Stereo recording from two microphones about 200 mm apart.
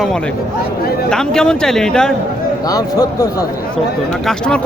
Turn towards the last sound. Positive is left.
turn(degrees=5)  # may be behind; listen again after turning